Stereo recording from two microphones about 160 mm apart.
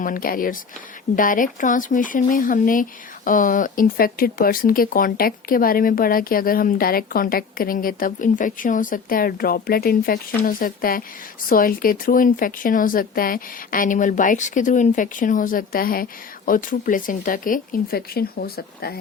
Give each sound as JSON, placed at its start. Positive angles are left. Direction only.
{"t": 0.0, "sound": "speech", "side_deg": 60}